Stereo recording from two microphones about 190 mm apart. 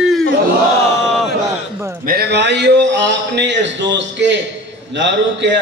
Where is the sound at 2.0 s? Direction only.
55° right (ahead or behind).